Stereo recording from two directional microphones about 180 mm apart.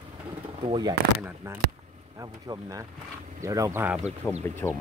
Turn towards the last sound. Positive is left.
turn(degrees=20)  # may be behind; listen again after turning